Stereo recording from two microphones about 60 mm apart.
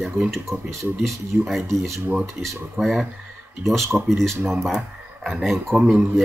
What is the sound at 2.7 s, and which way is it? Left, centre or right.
Speech, centre.